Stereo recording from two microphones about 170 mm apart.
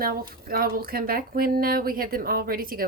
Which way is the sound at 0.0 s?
60° right (ahead or behind).